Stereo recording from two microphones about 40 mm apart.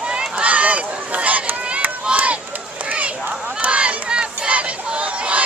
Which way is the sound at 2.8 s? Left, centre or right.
Right.